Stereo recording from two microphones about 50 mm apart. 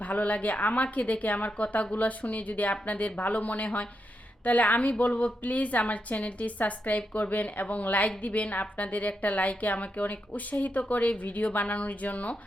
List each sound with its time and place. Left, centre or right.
0.0 s a woman's voice: left